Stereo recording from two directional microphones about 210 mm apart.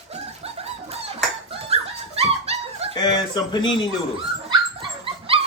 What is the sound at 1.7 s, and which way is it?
Dog, 30° right (ahead or behind).